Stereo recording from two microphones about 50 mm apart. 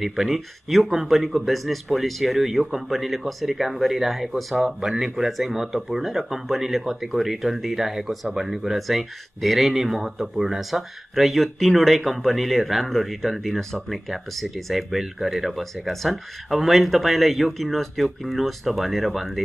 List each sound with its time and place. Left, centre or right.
0.0 s speech: centre